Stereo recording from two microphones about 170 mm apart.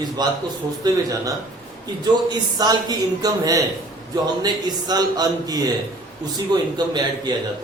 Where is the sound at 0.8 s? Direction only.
25° right (ahead or behind).